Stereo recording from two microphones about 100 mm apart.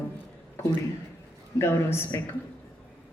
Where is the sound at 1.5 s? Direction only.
25° left (ahead or behind).